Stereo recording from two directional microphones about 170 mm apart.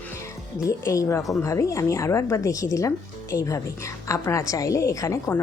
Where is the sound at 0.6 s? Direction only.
20° left (ahead or behind).